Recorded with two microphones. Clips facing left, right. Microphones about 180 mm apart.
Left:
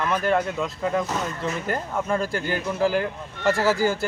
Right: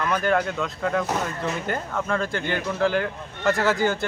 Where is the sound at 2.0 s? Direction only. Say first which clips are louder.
Left 1 dB; 10° left (ahead or behind).